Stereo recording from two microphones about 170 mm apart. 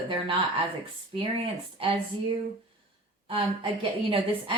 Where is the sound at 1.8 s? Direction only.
35° right (ahead or behind).